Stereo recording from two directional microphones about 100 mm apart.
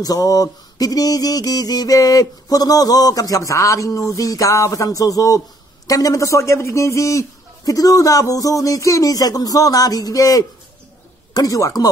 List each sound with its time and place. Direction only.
0.0 s music: 35° left (ahead or behind)